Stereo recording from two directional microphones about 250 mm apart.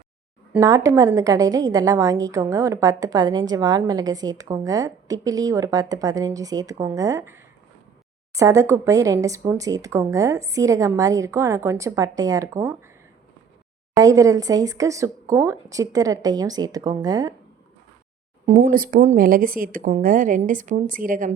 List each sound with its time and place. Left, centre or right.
0.5 s a woman's voice: centre
13.9 s a woman's voice: centre
18.4 s speech: right